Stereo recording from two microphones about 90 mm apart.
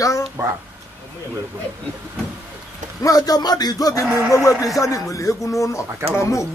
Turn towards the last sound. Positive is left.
turn(degrees=35)  # may be behind; listen again after turning